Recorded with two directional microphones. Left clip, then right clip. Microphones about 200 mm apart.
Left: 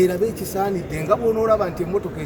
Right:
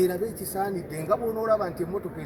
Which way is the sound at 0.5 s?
5° right (ahead or behind).